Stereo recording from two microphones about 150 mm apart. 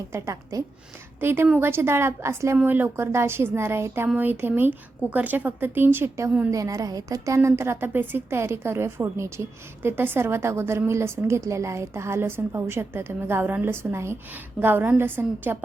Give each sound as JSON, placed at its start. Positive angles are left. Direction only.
{"t": 0.1, "sound": "a woman's voice", "side_deg": -20}